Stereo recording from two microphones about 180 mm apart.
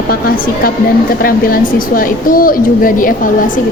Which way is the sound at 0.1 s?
55° left (ahead or behind).